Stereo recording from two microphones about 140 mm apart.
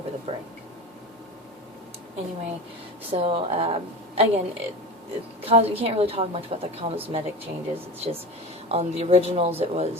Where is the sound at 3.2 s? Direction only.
45° right (ahead or behind).